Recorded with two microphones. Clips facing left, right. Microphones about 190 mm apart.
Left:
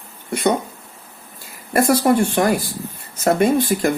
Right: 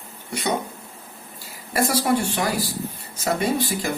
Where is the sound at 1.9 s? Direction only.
50° left (ahead or behind).